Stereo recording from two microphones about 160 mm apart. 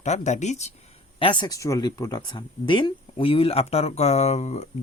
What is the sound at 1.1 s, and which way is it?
Speech, 30° left (ahead or behind).